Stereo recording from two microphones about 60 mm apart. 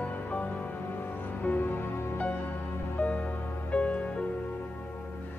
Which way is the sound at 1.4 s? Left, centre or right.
Left.